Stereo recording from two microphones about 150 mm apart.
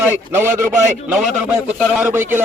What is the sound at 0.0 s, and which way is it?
A man's voice, 15° right (ahead or behind).